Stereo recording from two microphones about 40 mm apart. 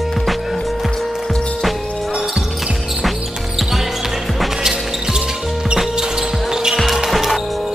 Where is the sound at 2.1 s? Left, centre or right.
Right.